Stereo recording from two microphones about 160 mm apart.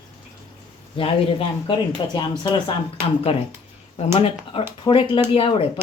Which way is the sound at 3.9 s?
35° left (ahead or behind).